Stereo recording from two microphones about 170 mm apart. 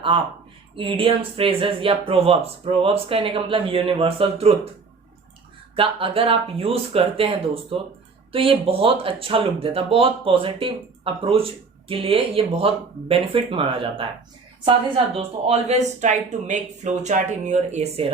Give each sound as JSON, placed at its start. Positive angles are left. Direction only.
{"t": 0.8, "sound": "speech", "side_deg": -30}
{"t": 5.7, "sound": "speech", "side_deg": -30}